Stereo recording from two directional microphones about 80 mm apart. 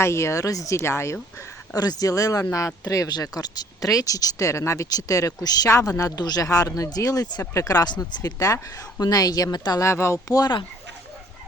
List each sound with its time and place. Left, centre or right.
0.0 s speech: left
0.8 s speech: left
1.8 s speech: left
9.8 s speech: left
10.3 s speech: left